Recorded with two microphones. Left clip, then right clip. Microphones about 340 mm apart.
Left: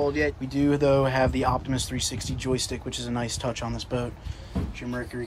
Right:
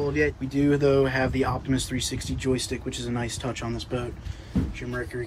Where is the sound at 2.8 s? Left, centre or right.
Left.